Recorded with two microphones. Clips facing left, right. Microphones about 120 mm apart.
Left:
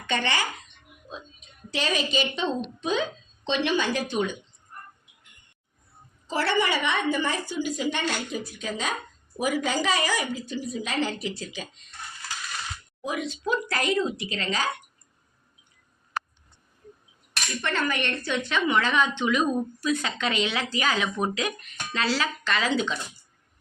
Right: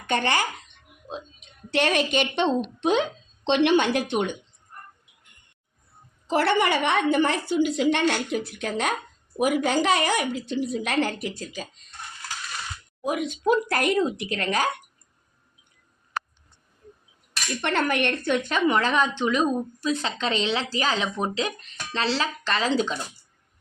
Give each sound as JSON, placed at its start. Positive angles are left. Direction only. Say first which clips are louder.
{"t": 0.1, "sound": "speech", "louder": "right 3 dB", "side_deg": -50}
{"t": 1.7, "sound": "a woman's voice", "louder": "right 4 dB", "side_deg": -65}
{"t": 6.2, "sound": "a woman's voice", "louder": "right 4 dB", "side_deg": -60}
{"t": 13.1, "sound": "a woman's voice", "louder": "right 5 dB", "side_deg": -55}
{"t": 17.6, "sound": "a woman's voice", "louder": "right 4 dB", "side_deg": -60}